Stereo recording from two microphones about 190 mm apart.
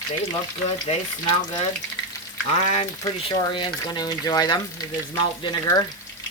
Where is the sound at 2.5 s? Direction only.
30° left (ahead or behind).